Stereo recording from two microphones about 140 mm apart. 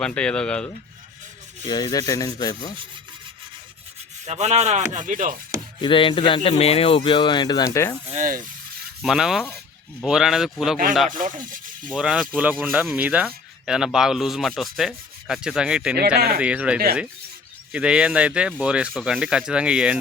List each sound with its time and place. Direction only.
0.0 s speech: 5° left (ahead or behind)
1.6 s speech: 30° left (ahead or behind)
4.3 s rub: 50° right (ahead or behind); by 5.4 s 75° right (ahead or behind)
5.8 s speech: 40° left (ahead or behind); by 7.9 s 20° left (ahead or behind)
8.2 s speech: 70° right (ahead or behind)
9.0 s rub: 5° right (ahead or behind)
10.0 s speech: 5° right (ahead or behind)
11.2 s speech: 75° right (ahead or behind)
11.9 s speech: 5° right (ahead or behind)
16.0 s speech: 90° right
16.4 s speech: 10° right (ahead or behind)